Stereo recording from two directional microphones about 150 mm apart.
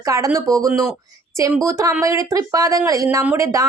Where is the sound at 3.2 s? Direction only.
10° right (ahead or behind).